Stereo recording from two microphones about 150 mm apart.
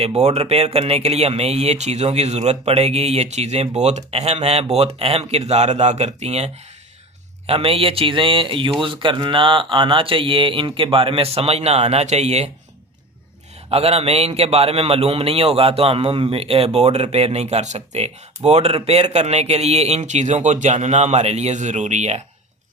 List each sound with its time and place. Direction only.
0.0 s a man's voice: 45° right (ahead or behind)
13.7 s a man's voice: 40° right (ahead or behind)